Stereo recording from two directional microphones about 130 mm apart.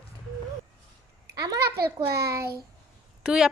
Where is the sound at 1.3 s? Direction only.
30° right (ahead or behind).